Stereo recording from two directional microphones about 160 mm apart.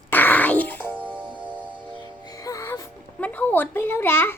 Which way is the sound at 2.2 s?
20° left (ahead or behind).